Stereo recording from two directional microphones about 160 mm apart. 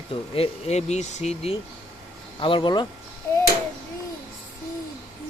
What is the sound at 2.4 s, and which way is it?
Speech, 30° left (ahead or behind).